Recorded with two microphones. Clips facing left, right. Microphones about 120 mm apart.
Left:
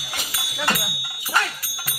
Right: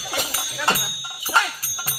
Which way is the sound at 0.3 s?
25° right (ahead or behind).